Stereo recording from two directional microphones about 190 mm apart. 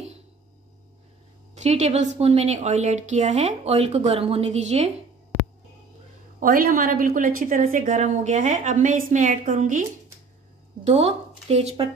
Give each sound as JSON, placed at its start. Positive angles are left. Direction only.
{"t": 1.5, "sound": "speech", "side_deg": -35}
{"t": 6.4, "sound": "a woman's voice", "side_deg": -50}